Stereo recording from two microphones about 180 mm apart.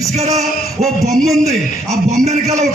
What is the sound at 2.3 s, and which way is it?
Speech, 40° right (ahead or behind).